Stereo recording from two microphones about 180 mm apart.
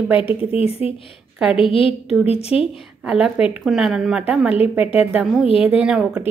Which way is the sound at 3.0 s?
5° right (ahead or behind).